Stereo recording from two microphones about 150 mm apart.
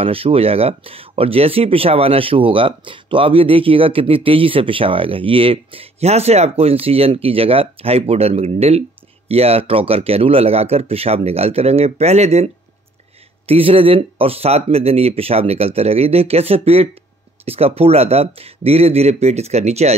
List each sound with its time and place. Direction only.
0.0 s speech: 40° right (ahead or behind)
13.5 s speech: 40° right (ahead or behind)